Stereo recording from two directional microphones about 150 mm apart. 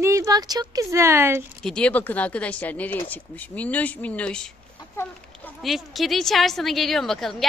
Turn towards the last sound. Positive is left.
turn(degrees=0)  # may be behind; listen again after turning